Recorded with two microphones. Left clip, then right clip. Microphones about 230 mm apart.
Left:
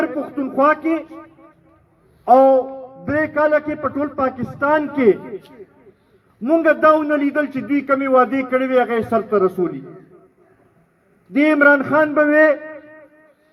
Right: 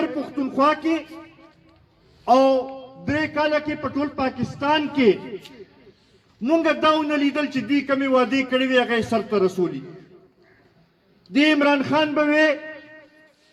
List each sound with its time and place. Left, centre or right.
0.0 s a man's voice: right
6.5 s a man's voice: right
11.3 s a man's voice: right